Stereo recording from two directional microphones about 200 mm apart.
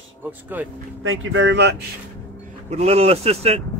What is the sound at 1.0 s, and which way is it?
Speech, 85° right.